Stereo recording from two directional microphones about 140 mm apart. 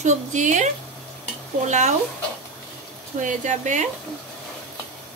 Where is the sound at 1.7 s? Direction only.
55° right (ahead or behind).